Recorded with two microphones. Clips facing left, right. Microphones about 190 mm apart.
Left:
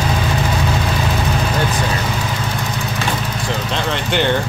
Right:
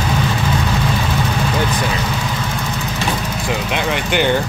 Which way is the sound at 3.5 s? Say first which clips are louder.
Right 2 dB; 10° right (ahead or behind).